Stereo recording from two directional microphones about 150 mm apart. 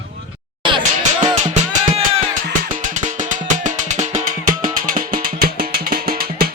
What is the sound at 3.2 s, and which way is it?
Music, 55° right (ahead or behind).